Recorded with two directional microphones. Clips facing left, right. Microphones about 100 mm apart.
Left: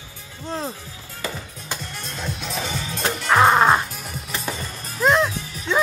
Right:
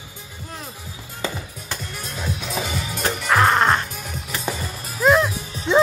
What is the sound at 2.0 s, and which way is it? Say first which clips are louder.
Music: right 1 dB; 5° right (ahead or behind).